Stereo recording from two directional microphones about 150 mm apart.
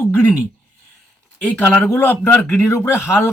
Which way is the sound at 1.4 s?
10° left (ahead or behind).